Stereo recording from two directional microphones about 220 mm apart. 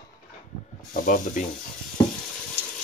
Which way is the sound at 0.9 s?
40° left (ahead or behind).